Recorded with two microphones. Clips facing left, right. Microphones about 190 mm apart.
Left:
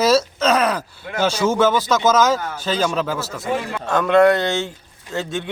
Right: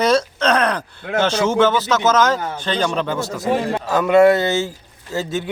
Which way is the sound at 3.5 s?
35° right (ahead or behind).